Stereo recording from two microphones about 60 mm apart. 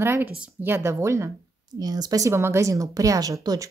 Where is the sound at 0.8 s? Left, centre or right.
Right.